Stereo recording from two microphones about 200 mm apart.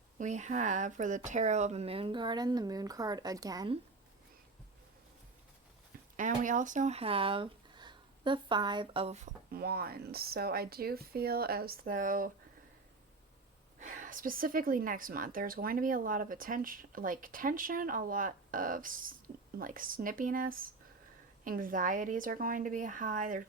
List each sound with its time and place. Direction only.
0.2 s speech: 35° right (ahead or behind); by 3.8 s 20° right (ahead or behind)
6.1 s speech: 40° right (ahead or behind)
13.7 s a woman's voice: 40° right (ahead or behind)